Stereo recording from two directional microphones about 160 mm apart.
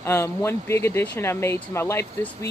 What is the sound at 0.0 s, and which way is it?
Speech, 15° left (ahead or behind).